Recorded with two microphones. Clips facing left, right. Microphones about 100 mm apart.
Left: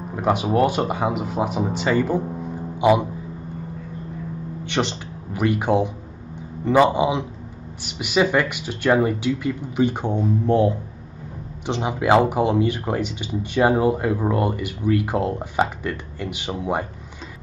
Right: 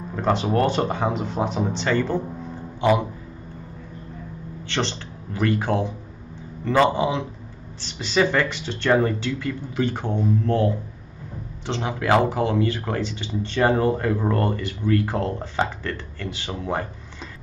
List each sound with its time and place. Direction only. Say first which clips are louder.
0.1 s speech: left 1 dB; 10° left (ahead or behind)
4.6 s a man's voice: left 2 dB; 15° left (ahead or behind)